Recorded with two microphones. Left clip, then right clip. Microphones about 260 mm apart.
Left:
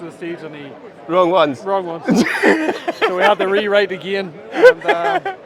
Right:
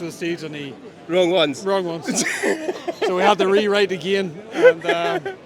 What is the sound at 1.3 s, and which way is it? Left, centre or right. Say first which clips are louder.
Speech: left 4 dB; centre.